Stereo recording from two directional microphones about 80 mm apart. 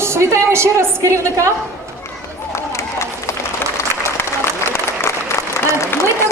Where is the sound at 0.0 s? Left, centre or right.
Right.